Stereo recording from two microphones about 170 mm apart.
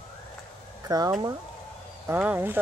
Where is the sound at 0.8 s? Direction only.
20° right (ahead or behind).